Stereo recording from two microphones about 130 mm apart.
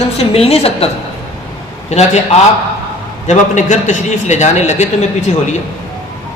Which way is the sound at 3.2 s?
70° left (ahead or behind).